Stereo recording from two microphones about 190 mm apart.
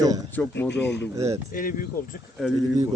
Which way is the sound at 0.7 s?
65° left (ahead or behind).